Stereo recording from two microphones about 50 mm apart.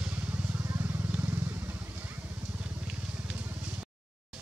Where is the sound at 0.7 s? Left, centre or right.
Right.